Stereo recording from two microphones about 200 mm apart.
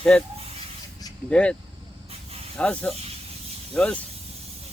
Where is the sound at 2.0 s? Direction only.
30° right (ahead or behind).